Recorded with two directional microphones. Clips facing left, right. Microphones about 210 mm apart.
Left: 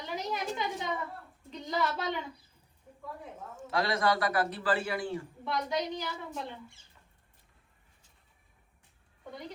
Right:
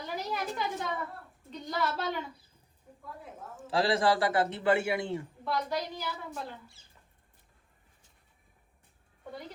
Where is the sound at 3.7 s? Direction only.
30° right (ahead or behind).